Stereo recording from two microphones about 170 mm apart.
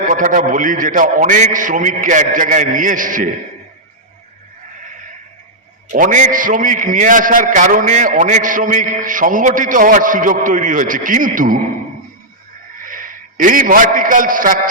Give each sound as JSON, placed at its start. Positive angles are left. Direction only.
{"t": 0.1, "sound": "a man's voice", "side_deg": -50}
{"t": 5.9, "sound": "a man's voice", "side_deg": -50}
{"t": 12.8, "sound": "a man's voice", "side_deg": -55}